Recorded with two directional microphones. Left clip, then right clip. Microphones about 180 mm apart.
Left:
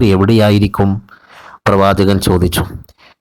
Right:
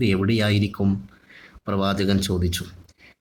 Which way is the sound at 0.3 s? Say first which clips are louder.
Left 12 dB; 45° left (ahead or behind).